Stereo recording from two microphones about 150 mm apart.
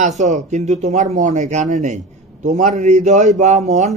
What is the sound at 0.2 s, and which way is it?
A man's voice, 55° right (ahead or behind).